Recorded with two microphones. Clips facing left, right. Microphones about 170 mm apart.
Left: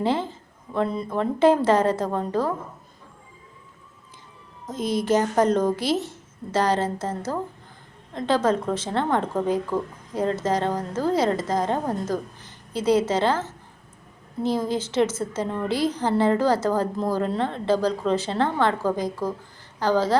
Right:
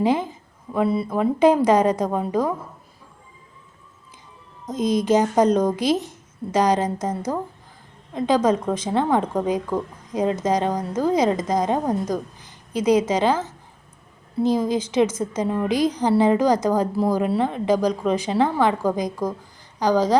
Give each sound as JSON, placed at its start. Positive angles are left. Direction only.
{"t": 0.0, "sound": "a woman's voice", "side_deg": -15}
{"t": 4.7, "sound": "a woman's voice", "side_deg": -15}